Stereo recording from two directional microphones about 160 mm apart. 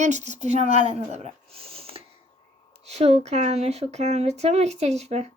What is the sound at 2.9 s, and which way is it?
A woman's voice, 40° right (ahead or behind).